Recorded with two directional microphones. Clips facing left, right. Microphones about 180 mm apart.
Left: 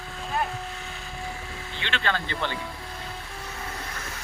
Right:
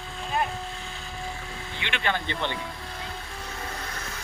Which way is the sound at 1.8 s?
15° right (ahead or behind).